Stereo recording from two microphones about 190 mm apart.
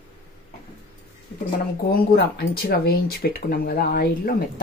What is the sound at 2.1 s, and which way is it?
Speech, 55° left (ahead or behind).